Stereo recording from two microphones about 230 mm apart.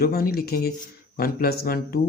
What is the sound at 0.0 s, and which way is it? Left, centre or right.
Speech, left.